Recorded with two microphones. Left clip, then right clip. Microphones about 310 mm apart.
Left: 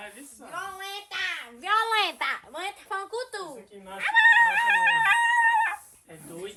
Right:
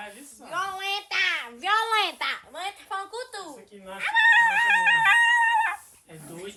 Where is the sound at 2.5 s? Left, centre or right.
Left.